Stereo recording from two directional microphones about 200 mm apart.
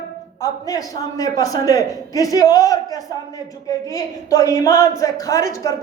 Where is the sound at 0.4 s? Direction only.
15° left (ahead or behind).